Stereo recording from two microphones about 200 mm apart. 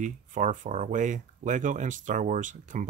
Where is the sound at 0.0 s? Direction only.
40° right (ahead or behind).